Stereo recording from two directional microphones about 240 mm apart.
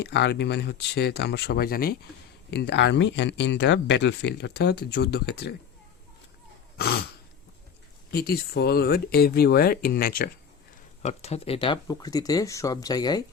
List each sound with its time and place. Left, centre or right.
0.0 s speech: left
8.1 s speech: left
11.0 s speech: left